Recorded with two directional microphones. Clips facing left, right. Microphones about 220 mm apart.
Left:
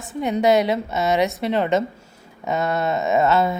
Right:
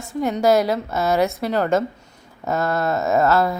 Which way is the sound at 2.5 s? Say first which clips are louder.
Right 1 dB; centre (ahead or behind).